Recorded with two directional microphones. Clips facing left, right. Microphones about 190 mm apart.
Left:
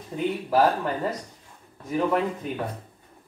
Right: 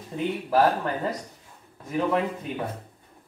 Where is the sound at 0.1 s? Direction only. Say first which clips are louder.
Left 2 dB; centre (ahead or behind).